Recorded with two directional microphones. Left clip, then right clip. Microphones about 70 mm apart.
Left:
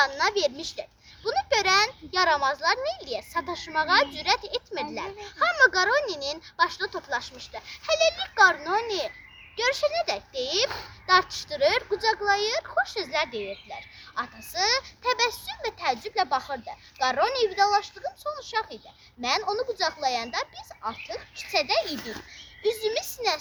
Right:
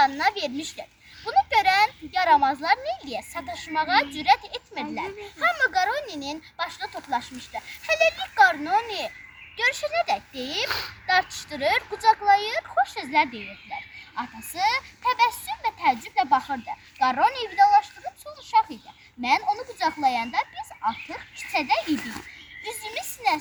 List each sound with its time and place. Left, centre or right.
0.0 s a child's voice: left
10.7 s a child's voice: centre
11.0 s a child's voice: left
19.2 s a child's voice: left